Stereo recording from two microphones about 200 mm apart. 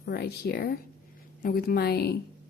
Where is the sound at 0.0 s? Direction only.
55° left (ahead or behind).